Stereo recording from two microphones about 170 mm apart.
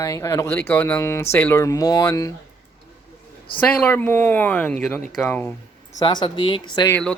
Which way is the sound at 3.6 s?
10° left (ahead or behind).